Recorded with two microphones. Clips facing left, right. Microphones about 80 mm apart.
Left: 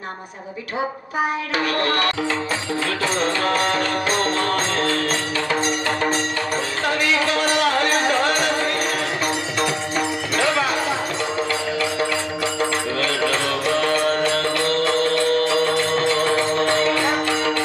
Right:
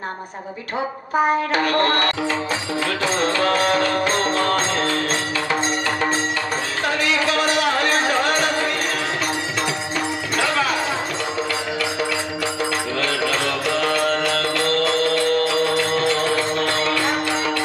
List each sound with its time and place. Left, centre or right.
1.5 s music: right
3.7 s music: right
13.0 s music: left
16.5 s music: left